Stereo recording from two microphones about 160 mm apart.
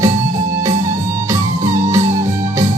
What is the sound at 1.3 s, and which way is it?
Music, 20° right (ahead or behind).